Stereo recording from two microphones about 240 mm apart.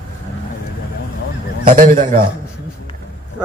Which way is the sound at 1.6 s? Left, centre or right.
Right.